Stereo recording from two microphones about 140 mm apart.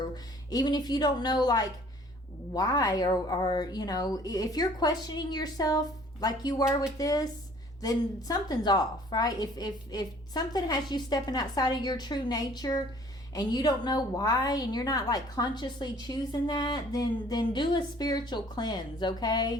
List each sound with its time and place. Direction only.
0.5 s a woman's voice: 30° left (ahead or behind)